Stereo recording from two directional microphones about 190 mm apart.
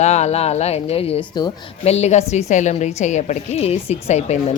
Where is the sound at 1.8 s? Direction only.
35° left (ahead or behind).